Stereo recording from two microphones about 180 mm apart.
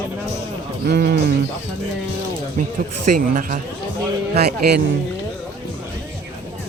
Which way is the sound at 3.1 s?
50° right (ahead or behind).